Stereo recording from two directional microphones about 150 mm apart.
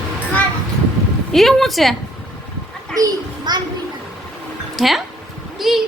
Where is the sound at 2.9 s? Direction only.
25° right (ahead or behind).